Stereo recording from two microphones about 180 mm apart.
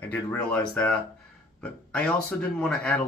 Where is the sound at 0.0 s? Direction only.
10° left (ahead or behind).